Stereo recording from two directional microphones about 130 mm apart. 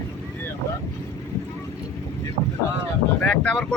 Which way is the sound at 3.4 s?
10° left (ahead or behind).